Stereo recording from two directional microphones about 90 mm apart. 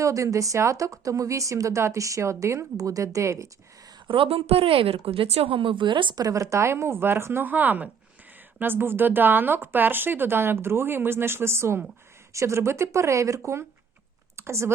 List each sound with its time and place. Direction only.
0.0 s a woman's voice: 35° right (ahead or behind)
4.0 s speech: 75° right (ahead or behind)
6.1 s a woman's voice: 40° right (ahead or behind)